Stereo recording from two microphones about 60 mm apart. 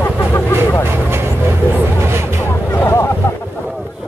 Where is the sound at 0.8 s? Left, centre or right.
Right.